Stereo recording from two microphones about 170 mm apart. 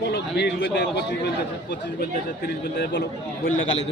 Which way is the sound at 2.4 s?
85° left.